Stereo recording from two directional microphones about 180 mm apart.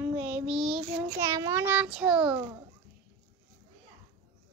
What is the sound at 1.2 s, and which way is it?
A child's voice, 20° right (ahead or behind).